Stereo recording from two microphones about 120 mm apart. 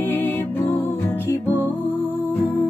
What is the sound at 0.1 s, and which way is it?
Music, 15° left (ahead or behind).